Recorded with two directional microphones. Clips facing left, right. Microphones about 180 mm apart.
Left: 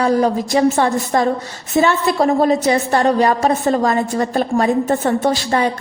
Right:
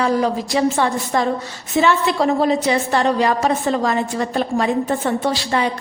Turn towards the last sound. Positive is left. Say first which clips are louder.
# left 3 dB
turn(degrees=45)  # may be behind; listen again after turning